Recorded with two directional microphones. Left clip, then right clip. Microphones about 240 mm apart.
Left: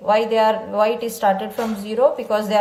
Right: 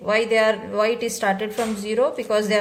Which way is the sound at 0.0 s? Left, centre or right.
Right.